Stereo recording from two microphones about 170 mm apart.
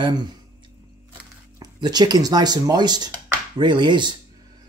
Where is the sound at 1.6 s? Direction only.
25° right (ahead or behind).